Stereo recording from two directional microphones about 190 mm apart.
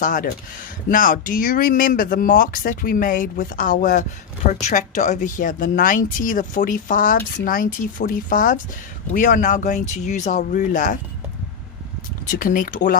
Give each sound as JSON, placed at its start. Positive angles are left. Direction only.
{"t": 0.0, "sound": "speech", "side_deg": 45}
{"t": 12.4, "sound": "speech", "side_deg": 45}